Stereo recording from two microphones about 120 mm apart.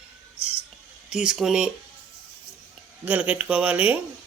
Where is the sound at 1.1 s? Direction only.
5° right (ahead or behind).